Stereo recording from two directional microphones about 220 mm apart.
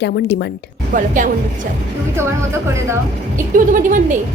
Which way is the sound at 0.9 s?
35° right (ahead or behind).